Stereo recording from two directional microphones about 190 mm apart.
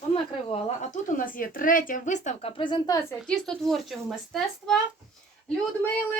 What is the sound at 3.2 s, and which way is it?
A woman's voice, 5° left (ahead or behind).